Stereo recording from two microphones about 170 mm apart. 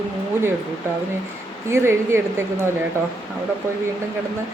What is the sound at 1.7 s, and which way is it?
Speech, 15° right (ahead or behind).